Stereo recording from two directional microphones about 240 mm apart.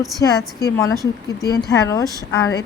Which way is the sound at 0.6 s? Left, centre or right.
Centre.